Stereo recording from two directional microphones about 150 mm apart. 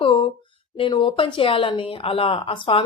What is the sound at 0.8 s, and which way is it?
A woman's voice, 35° left (ahead or behind).